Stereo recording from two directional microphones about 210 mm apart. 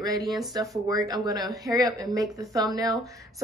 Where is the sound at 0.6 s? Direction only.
15° right (ahead or behind).